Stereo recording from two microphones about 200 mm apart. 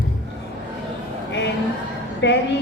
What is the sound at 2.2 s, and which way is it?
Speech, 60° left (ahead or behind).